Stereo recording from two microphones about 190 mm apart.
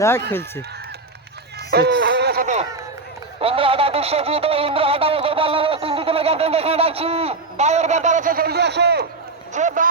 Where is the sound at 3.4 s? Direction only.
30° right (ahead or behind); by 9.1 s 60° right (ahead or behind).